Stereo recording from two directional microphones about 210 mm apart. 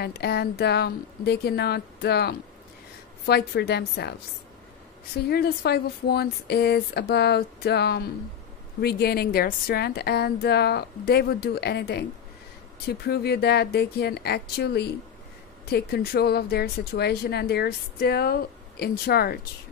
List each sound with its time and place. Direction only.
0.0 s speech: 50° left (ahead or behind)
5.1 s speech: 50° left (ahead or behind)